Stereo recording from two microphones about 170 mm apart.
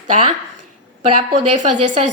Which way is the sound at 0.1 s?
40° right (ahead or behind).